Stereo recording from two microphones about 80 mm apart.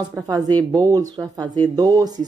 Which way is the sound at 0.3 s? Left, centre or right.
Right.